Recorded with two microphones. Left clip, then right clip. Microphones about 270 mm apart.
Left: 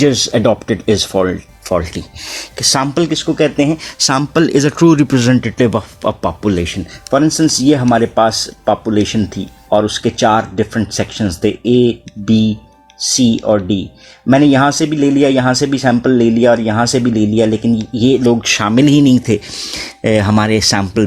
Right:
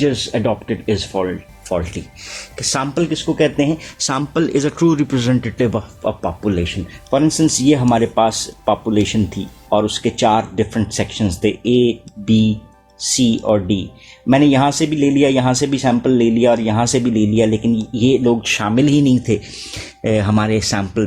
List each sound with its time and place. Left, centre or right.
0.0 s speech: left